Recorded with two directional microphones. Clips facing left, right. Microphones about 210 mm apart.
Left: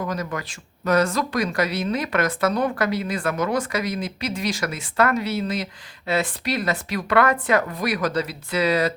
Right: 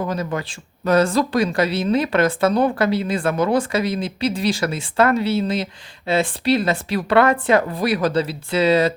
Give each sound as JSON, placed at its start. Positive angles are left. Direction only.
{"t": 0.1, "sound": "speech", "side_deg": -30}